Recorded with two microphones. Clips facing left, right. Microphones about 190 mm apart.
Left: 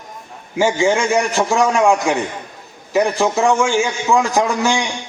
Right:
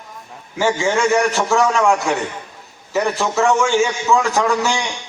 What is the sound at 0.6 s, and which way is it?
A man's voice, 15° left (ahead or behind).